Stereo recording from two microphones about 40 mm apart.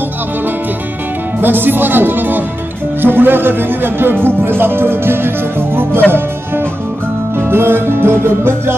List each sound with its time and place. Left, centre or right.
1.4 s speech: right
4.4 s music: right
6.1 s speech: right
7.3 s music: right